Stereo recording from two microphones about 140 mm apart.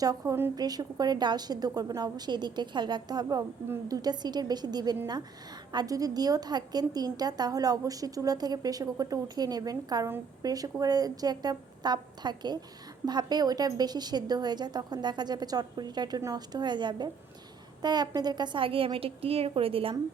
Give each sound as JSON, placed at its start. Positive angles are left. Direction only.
{"t": 0.0, "sound": "a woman's voice", "side_deg": -25}